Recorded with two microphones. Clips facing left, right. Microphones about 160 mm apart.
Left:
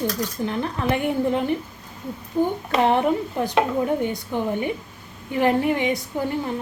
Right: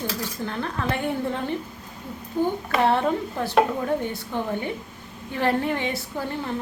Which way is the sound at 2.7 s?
20° left (ahead or behind).